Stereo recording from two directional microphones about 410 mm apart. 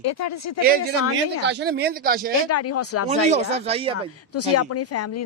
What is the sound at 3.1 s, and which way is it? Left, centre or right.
Speech, centre.